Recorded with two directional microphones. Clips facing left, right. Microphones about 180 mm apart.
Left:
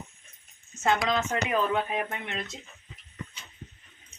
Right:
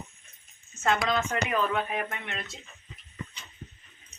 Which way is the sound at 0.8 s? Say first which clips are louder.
Left 1 dB; 20° left (ahead or behind).